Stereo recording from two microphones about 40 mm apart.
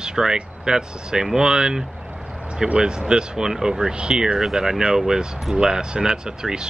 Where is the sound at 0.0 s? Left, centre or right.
Centre.